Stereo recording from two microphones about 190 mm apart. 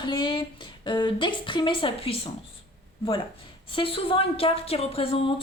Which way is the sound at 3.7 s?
25° left (ahead or behind).